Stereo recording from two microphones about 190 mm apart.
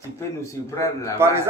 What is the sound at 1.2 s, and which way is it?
Speech, 15° right (ahead or behind).